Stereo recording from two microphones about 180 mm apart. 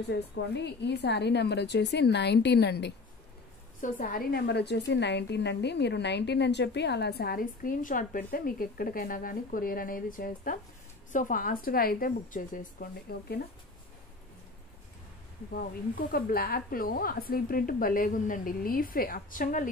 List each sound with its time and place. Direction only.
0.1 s a woman's voice: 70° left (ahead or behind)
3.8 s a woman's voice: 50° left (ahead or behind)
15.5 s speech: 55° left (ahead or behind)